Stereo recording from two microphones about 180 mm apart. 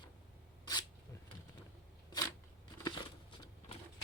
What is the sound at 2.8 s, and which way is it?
Crumpling, 20° left (ahead or behind).